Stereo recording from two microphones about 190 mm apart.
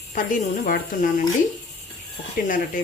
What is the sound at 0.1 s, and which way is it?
Speech, 45° left (ahead or behind).